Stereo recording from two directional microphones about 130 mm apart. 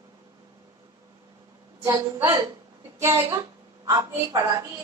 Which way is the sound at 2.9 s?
20° right (ahead or behind).